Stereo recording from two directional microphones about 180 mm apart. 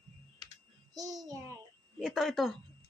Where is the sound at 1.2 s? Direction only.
20° right (ahead or behind).